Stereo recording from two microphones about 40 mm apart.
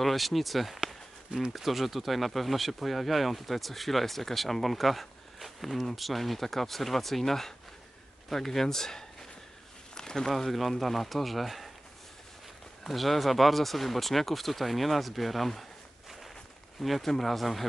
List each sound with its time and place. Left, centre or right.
0.0 s speech: centre
9.9 s a sound: centre
10.3 s speech: centre
12.8 s speech: centre
16.8 s speech: centre